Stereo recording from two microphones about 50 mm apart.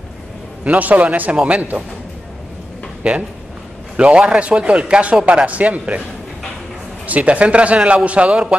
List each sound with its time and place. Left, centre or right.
0.7 s a man's voice: right
3.0 s a man's voice: right
7.1 s a man's voice: right